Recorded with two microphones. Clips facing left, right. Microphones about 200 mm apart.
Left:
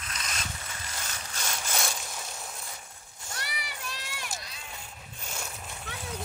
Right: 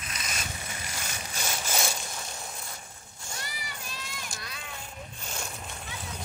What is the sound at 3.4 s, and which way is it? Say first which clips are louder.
Run: left 2 dB; 70° left (ahead or behind).